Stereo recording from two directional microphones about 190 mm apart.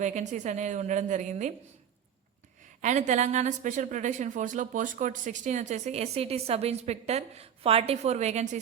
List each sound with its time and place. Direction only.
0.0 s speech: 40° right (ahead or behind)
2.8 s speech: 40° right (ahead or behind)